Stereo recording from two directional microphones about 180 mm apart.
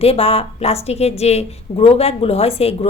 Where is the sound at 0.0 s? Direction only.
35° left (ahead or behind).